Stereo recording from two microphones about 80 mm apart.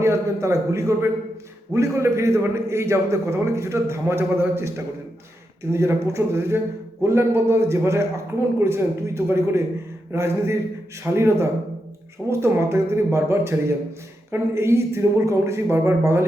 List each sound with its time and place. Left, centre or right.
0.0 s a man's voice: right
5.7 s a man's voice: right